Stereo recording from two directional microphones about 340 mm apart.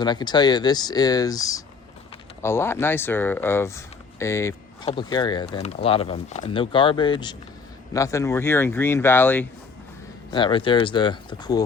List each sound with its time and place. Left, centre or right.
0.0 s speech: centre